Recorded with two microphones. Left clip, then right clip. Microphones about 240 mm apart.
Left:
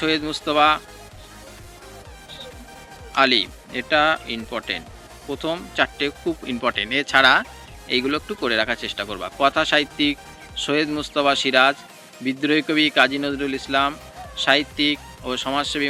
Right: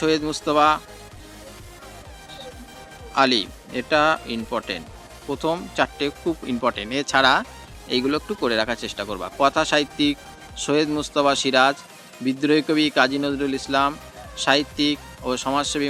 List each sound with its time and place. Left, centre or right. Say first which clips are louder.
0.0 s speech: right 1 dB; right
3.2 s speech: left 1 dB; right